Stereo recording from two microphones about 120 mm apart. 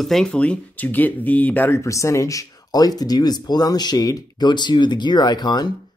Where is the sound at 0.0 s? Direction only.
5° left (ahead or behind).